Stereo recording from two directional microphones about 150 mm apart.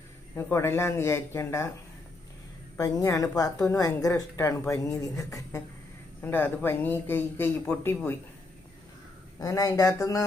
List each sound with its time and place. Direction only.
0.3 s speech: 15° left (ahead or behind)
2.7 s a woman's voice: 20° left (ahead or behind)
9.4 s a woman's voice: 25° left (ahead or behind)